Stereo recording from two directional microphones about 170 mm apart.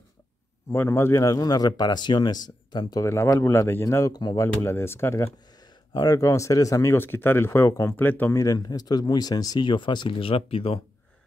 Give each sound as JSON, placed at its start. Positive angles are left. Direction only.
{"t": 0.7, "sound": "a man's voice", "side_deg": 15}